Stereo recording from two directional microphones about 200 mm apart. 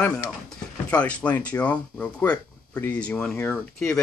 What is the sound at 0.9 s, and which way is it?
Speech, 5° left (ahead or behind).